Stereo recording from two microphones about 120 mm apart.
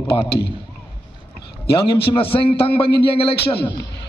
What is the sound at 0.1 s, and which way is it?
Speech, 40° left (ahead or behind).